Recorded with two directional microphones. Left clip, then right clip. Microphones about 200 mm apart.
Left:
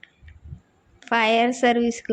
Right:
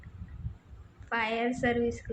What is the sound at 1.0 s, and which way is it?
Speech, 45° left (ahead or behind).